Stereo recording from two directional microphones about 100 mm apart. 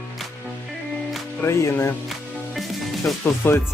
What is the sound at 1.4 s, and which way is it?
Speech, 25° left (ahead or behind).